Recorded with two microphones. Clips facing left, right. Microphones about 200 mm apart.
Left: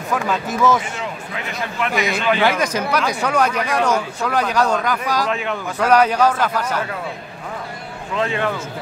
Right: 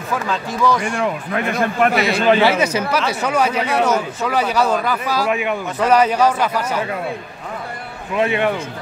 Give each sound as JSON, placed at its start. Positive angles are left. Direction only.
{"t": 1.0, "sound": "a man's voice", "side_deg": -55}
{"t": 2.0, "sound": "a man's voice", "side_deg": -35}
{"t": 2.4, "sound": "speech", "side_deg": -10}
{"t": 8.1, "sound": "speech", "side_deg": -15}